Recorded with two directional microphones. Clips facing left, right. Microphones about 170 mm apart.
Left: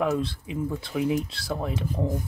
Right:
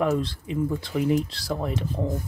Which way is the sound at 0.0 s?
Centre (ahead or behind).